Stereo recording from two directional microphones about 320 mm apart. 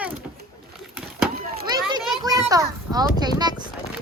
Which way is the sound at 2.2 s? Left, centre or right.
Centre.